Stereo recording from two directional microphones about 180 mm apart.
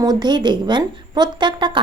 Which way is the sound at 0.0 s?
25° right (ahead or behind).